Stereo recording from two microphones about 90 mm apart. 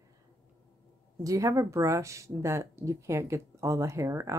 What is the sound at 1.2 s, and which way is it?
Speech, 40° right (ahead or behind).